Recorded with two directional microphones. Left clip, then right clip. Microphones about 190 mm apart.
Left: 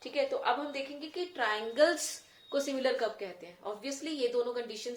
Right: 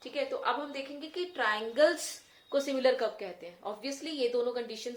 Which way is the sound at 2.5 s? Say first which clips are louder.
Right 3 dB; 20° right (ahead or behind).